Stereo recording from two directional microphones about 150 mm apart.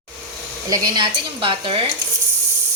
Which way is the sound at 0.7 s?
25° right (ahead or behind).